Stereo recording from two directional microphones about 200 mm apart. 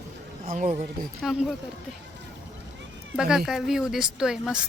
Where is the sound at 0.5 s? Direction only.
35° right (ahead or behind).